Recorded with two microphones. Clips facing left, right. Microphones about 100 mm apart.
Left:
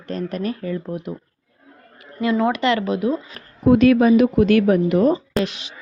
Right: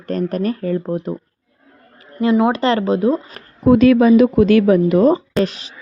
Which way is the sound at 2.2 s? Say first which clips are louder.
Right 4 dB; 25° right (ahead or behind).